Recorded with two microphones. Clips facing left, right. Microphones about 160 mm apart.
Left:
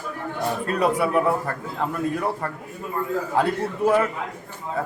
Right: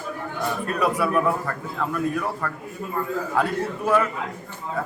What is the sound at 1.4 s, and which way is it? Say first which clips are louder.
A man's voice: left 1 dB; 35° left (ahead or behind).